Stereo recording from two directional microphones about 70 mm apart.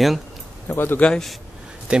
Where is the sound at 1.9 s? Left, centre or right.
Centre.